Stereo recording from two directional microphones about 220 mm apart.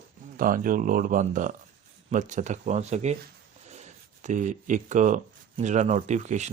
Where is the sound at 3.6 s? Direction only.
30° right (ahead or behind).